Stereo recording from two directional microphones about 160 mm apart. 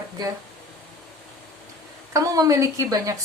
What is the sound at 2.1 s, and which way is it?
A woman's voice, 20° right (ahead or behind).